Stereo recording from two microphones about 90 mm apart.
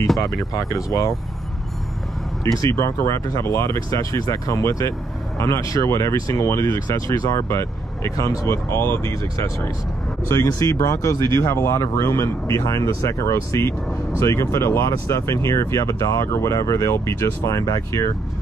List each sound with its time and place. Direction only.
0.2 s speech: 40° left (ahead or behind)
2.4 s speech: 35° left (ahead or behind)
8.6 s speech: 25° left (ahead or behind)
17.5 s speech: 40° left (ahead or behind)